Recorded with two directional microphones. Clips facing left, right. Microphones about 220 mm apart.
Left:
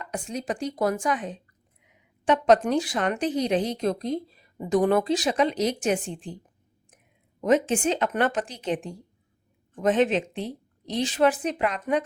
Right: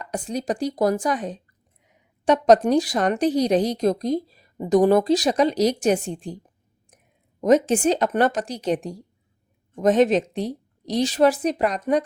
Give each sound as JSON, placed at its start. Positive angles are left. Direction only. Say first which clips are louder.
{"t": 0.0, "sound": "a woman's voice", "louder": "right 5 dB", "side_deg": -35}
{"t": 7.7, "sound": "a woman's voice", "louder": "right 5 dB", "side_deg": -40}